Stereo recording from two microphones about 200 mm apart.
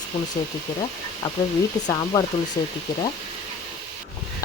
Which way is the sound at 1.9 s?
20° left (ahead or behind).